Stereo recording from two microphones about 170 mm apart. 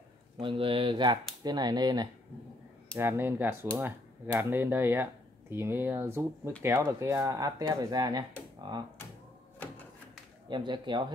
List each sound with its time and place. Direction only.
0.4 s speech: 30° right (ahead or behind)
3.0 s speech: 15° right (ahead or behind)
10.5 s speech: 25° right (ahead or behind)